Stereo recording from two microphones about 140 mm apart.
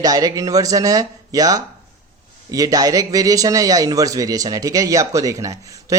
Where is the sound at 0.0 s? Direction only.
25° right (ahead or behind).